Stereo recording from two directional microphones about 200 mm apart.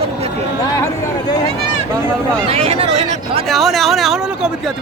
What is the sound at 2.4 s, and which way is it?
Speech, 30° right (ahead or behind).